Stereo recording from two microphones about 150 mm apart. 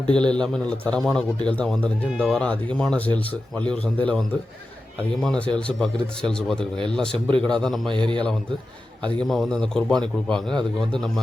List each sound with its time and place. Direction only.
0.1 s a man's voice: 5° left (ahead or behind)
5.2 s a man's voice: 5° left (ahead or behind)
7.9 s a man's voice: 30° right (ahead or behind)
9.0 s a man's voice: 5° left (ahead or behind)